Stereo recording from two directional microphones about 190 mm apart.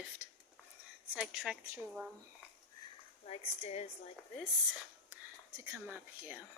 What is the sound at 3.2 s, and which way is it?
Speech, 35° left (ahead or behind).